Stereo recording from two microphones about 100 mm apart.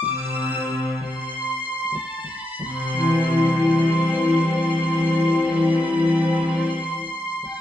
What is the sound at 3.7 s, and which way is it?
Music, 15° right (ahead or behind).